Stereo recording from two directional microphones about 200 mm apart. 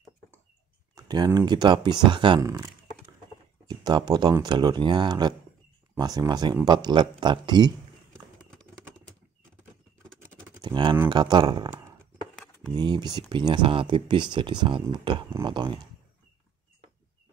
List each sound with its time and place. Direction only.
0.9 s speech: 20° right (ahead or behind)
10.6 s speech: 20° right (ahead or behind)
12.7 s speech: 20° right (ahead or behind)